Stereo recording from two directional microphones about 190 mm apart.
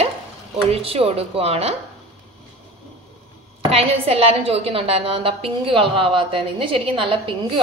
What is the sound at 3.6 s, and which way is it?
A woman's voice, 30° right (ahead or behind).